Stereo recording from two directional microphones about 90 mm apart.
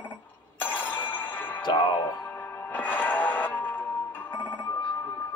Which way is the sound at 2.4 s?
20° left (ahead or behind).